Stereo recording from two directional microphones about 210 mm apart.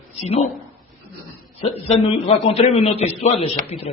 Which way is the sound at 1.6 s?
30° left (ahead or behind).